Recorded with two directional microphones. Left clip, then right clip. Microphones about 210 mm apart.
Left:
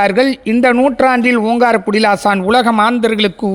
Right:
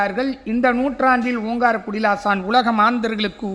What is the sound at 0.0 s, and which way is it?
A woman's voice, 40° left (ahead or behind).